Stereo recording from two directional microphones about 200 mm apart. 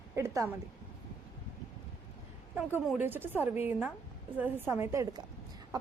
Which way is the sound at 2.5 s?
5° right (ahead or behind).